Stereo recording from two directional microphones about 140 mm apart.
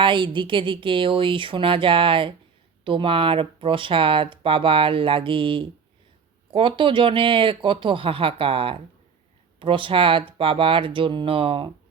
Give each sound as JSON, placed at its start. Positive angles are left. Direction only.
{"t": 0.0, "sound": "speech", "side_deg": -35}